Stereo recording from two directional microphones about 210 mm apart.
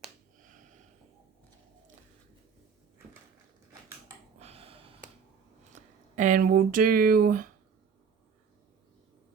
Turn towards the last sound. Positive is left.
turn(degrees=-40)  # may be behind; listen again after turning